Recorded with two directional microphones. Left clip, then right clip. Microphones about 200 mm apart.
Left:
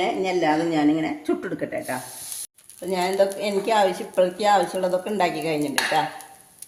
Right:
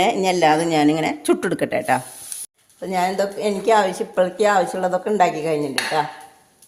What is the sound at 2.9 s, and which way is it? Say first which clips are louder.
A woman's voice: right 1 dB; 30° right (ahead or behind).